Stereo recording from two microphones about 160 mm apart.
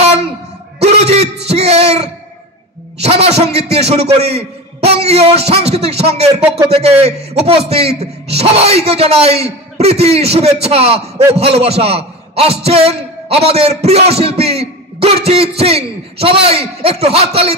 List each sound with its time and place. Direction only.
0.7 s a sound: 40° right (ahead or behind)
1.5 s music: 40° right (ahead or behind)
3.0 s a man's voice: 40° right (ahead or behind)